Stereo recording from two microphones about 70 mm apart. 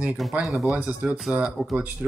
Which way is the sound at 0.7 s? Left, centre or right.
Centre.